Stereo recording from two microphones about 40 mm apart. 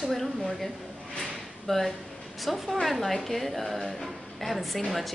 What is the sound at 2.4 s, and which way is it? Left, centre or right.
A woman's voice, centre.